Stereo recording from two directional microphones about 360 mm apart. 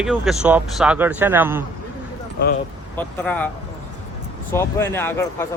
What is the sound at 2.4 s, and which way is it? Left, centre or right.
Speech, left.